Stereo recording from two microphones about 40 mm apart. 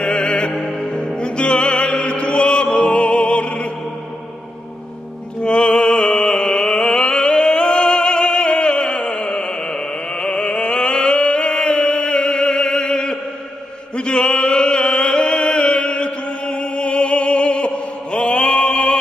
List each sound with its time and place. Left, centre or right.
0.0 s music: left
0.6 s music: centre
5.4 s mantra: left
13.9 s chant: left